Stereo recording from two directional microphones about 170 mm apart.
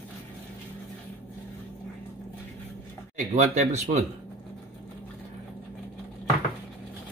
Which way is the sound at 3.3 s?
45° right (ahead or behind).